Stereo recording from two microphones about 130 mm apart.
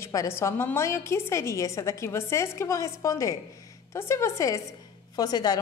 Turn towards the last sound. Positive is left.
turn(degrees=30)  # may be behind; listen again after turning